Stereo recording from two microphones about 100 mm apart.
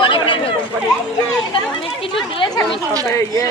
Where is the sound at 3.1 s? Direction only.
30° left (ahead or behind).